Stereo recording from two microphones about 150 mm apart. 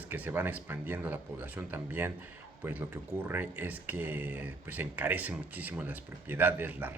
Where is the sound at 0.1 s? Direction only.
15° right (ahead or behind).